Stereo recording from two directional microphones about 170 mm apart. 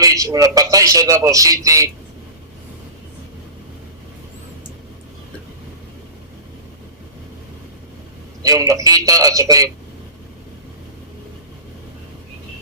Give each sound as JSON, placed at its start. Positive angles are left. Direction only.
{"t": 0.0, "sound": "a man's voice", "side_deg": -20}
{"t": 8.4, "sound": "a man's voice", "side_deg": -20}